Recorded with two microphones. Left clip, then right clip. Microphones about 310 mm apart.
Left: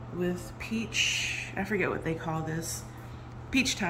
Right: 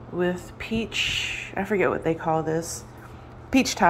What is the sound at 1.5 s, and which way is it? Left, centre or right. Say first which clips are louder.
Speech: right 9 dB; right.